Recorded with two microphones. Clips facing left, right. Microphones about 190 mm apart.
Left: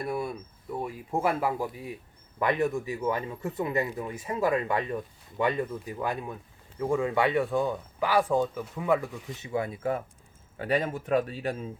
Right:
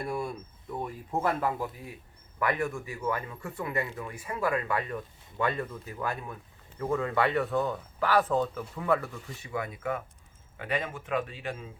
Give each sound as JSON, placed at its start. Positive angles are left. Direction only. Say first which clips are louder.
{"t": 0.0, "sound": "speech", "louder": "left 2 dB", "side_deg": 5}
{"t": 9.4, "sound": "speech", "louder": "left 5 dB", "side_deg": 25}